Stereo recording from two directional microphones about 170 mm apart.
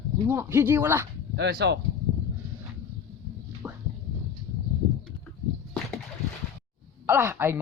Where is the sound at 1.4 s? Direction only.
75° right (ahead or behind).